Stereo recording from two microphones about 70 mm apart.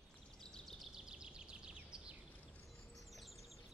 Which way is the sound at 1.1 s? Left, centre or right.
Centre.